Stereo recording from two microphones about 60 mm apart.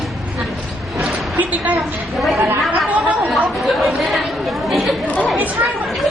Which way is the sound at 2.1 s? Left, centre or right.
Centre.